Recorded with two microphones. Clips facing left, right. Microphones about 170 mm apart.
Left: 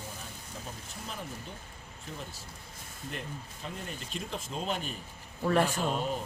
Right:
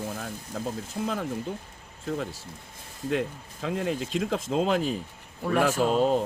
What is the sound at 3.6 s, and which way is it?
Speech, 90° right.